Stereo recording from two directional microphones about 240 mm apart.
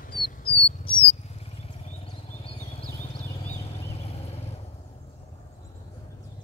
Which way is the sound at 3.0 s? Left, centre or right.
Left.